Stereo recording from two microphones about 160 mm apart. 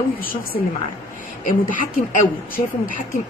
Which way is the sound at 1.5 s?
55° left (ahead or behind).